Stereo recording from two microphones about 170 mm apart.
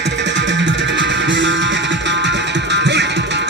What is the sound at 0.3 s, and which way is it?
Music, 90° right.